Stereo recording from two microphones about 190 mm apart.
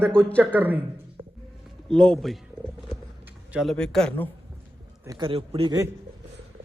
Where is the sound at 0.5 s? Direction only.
10° right (ahead or behind).